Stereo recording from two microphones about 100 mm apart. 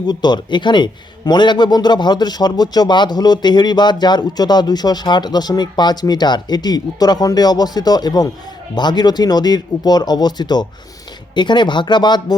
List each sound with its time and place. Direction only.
0.1 s a man's voice: 45° left (ahead or behind)